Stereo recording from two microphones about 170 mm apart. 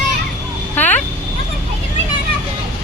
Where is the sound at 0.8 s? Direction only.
10° left (ahead or behind).